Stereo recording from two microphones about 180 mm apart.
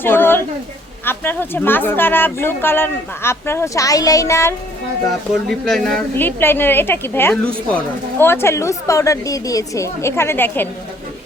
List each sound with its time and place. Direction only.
0.0 s a sound: 10° left (ahead or behind)
1.0 s speech: 10° left (ahead or behind)
5.3 s speech: centre (ahead or behind)